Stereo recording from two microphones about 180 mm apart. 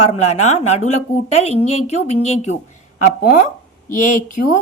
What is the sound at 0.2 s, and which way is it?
Speech, 40° left (ahead or behind).